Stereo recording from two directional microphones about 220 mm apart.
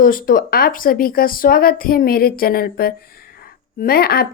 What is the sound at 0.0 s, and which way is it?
Speech, 40° left (ahead or behind).